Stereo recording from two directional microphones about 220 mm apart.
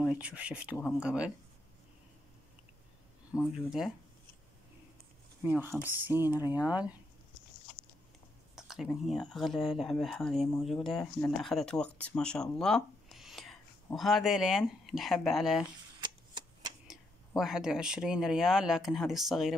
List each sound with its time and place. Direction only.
0.0 s speech: 5° right (ahead or behind)
3.3 s speech: 5° right (ahead or behind)
5.4 s speech: 10° right (ahead or behind)
8.5 s speech: centre (ahead or behind)
16.0 s a sound: 20° right (ahead or behind)
16.8 s speech: centre (ahead or behind)